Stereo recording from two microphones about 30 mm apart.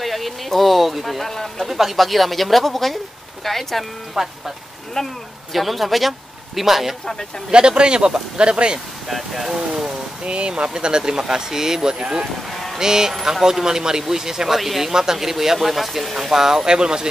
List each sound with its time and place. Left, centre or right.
0.0 s a man's voice: centre
4.2 s speech: centre
5.0 s speech: centre
5.5 s a man's voice: centre
7.5 s a man's voice: right
9.1 s speech: centre
9.6 s speech: right
10.2 s speech: right; by 14.6 s centre
14.6 s a man's voice: centre
14.9 s speech: centre
16.6 s speech: right